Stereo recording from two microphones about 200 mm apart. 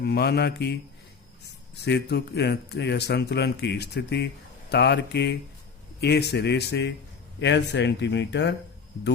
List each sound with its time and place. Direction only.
0.0 s a man's voice: 55° left (ahead or behind)
1.8 s a man's voice: 55° left (ahead or behind)